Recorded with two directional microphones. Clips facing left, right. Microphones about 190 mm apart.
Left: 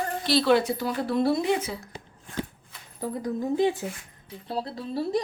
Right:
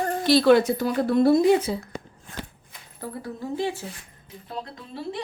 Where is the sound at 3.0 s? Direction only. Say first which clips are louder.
Left 5 dB; 15° left (ahead or behind).